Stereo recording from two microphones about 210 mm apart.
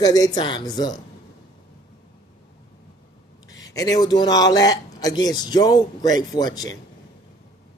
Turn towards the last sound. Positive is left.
turn(degrees=20)  # may be behind; listen again after turning